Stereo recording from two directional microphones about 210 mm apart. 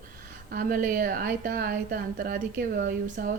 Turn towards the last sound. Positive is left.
turn(degrees=-40)  # may be behind; listen again after turning